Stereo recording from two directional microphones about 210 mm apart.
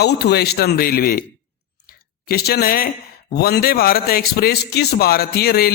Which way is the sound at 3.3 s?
50° left (ahead or behind).